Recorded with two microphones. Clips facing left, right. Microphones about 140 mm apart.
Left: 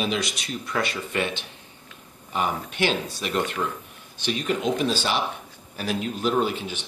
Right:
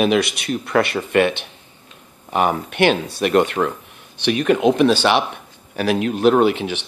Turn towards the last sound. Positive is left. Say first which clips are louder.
# right 8 dB
turn(degrees=-75)  # may be behind; listen again after turning